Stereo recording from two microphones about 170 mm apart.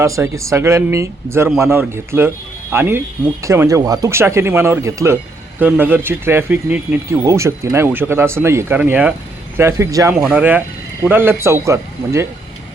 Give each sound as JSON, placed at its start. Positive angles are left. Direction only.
{"t": 0.0, "sound": "speech", "side_deg": -20}
{"t": 10.2, "sound": "speech", "side_deg": -5}